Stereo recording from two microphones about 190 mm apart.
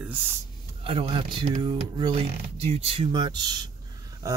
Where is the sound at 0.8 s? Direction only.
30° right (ahead or behind).